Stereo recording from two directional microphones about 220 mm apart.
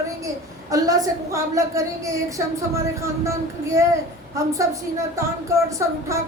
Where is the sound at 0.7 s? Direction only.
15° right (ahead or behind).